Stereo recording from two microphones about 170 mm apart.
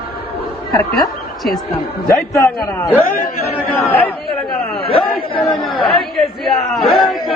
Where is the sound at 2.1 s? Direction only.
10° left (ahead or behind).